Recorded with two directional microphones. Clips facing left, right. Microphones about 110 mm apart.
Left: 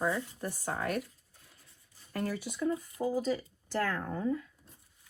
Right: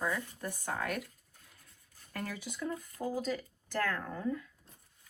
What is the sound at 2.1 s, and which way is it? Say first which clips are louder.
Speech: left 5 dB; 40° left (ahead or behind).